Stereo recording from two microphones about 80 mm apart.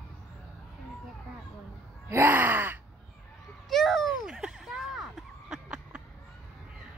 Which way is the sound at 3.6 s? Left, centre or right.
Centre.